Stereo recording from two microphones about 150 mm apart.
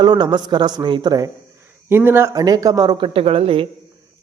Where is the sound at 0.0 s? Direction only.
30° right (ahead or behind).